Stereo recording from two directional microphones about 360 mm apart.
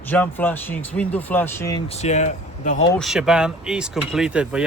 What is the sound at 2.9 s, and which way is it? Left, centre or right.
Speech, centre.